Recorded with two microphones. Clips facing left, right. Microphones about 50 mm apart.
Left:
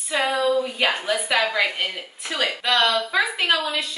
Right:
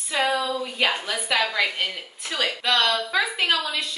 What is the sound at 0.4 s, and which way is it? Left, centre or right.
A woman's voice, centre.